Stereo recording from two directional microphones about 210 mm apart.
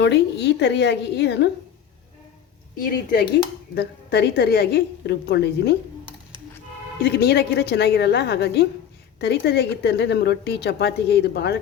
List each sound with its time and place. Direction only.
0.0 s a woman's voice: 55° left (ahead or behind)
2.7 s speech: 45° left (ahead or behind)
7.0 s speech: 50° left (ahead or behind)